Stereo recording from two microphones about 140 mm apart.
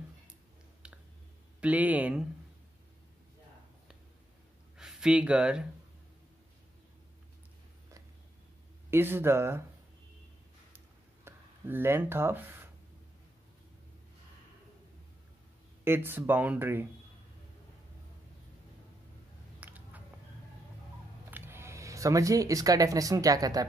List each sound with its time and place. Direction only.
0.8 s a sound: 5° right (ahead or behind)
1.6 s speech: 10° right (ahead or behind)
4.7 s speech: 5° right (ahead or behind)
8.9 s speech: 15° right (ahead or behind)
11.2 s speech: 15° right (ahead or behind)
15.8 s speech: 15° right (ahead or behind)
19.6 s a sound: 10° right (ahead or behind)
21.3 s speech: 15° right (ahead or behind)